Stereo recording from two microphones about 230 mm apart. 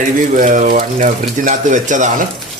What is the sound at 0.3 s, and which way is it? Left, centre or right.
Speech, right.